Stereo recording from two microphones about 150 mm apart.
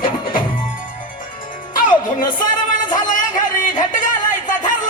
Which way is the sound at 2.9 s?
60° left (ahead or behind).